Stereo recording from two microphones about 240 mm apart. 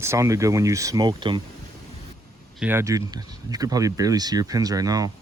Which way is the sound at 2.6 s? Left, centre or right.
Centre.